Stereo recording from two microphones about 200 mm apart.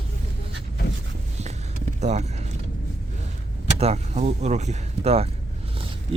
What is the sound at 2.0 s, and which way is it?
Vehicle, 35° right (ahead or behind).